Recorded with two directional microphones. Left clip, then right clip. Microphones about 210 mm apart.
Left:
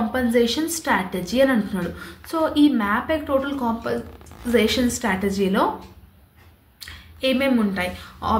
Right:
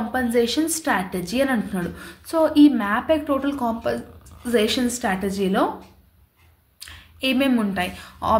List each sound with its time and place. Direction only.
0.1 s a woman's voice: 20° right (ahead or behind)
6.8 s speech: 25° right (ahead or behind)